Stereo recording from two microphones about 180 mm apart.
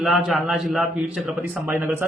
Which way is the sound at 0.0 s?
Centre (ahead or behind).